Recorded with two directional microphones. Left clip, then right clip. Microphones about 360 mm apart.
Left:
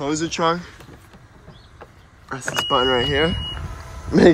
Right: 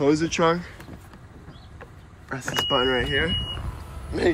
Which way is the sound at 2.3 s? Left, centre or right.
Centre.